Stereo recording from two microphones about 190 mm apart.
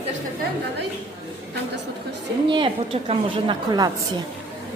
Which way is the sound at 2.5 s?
25° right (ahead or behind).